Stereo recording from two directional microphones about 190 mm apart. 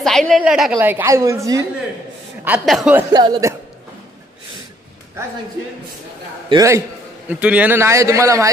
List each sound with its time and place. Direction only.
0.0 s a woman's voice: centre (ahead or behind); by 1.6 s 15° right (ahead or behind)
2.4 s a woman's voice: 5° right (ahead or behind)
3.1 s speech: 20° right (ahead or behind)
6.5 s a woman's voice: 15° right (ahead or behind)